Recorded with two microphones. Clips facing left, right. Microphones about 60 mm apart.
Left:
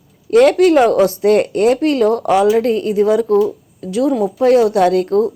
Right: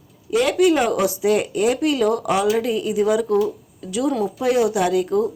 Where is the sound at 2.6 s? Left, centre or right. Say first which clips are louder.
Left 6 dB; left.